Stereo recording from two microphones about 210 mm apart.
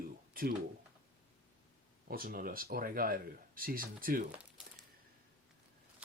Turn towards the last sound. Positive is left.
turn(degrees=-45)  # may be behind; listen again after turning